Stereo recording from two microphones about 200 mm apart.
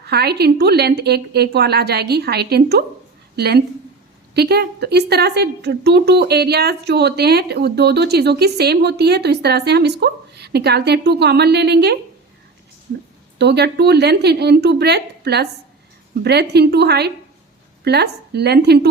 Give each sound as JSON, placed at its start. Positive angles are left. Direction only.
{"t": 0.1, "sound": "a woman's voice", "side_deg": -55}
{"t": 13.4, "sound": "a woman's voice", "side_deg": -55}